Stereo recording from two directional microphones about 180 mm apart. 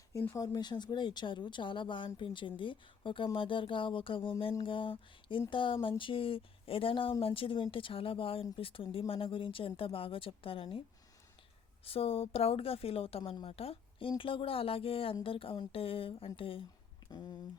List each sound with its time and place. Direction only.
0.1 s speech: 15° left (ahead or behind); by 10.8 s 30° left (ahead or behind)
11.9 s a woman's voice: 30° left (ahead or behind)